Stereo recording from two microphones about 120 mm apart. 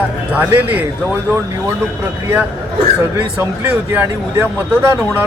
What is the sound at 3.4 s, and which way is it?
A man's voice, 15° right (ahead or behind).